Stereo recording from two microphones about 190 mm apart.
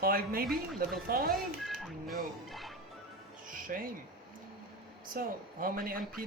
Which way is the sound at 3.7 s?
50° right (ahead or behind).